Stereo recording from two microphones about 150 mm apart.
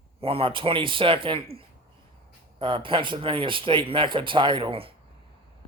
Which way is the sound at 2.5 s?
35° right (ahead or behind).